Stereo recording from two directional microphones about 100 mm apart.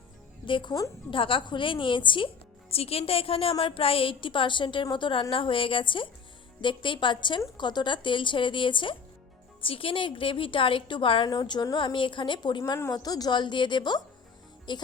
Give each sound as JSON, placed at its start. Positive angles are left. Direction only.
{"t": 0.4, "sound": "a woman's voice", "side_deg": 55}
{"t": 11.3, "sound": "a woman's voice", "side_deg": 45}
{"t": 12.7, "sound": "a woman's voice", "side_deg": 35}